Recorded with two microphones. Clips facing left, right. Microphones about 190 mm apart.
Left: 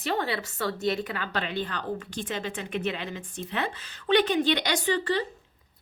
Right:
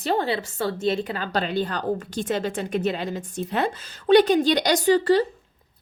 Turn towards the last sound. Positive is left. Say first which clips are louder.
# right 8 dB
turn(degrees=-40)  # may be behind; listen again after turning